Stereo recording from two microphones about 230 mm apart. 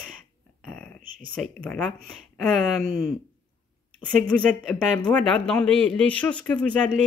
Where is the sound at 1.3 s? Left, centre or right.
Centre.